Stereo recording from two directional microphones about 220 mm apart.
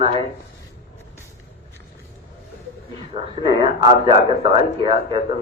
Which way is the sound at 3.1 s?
20° right (ahead or behind).